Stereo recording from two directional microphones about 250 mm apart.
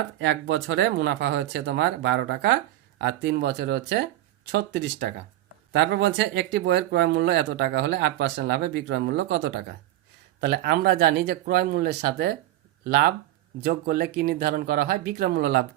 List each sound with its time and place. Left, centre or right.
0.3 s speech: right